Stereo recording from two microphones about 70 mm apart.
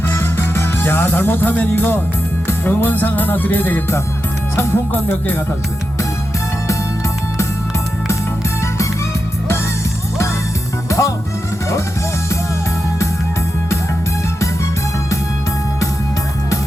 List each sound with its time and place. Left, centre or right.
0.1 s music: left
10.8 s music: left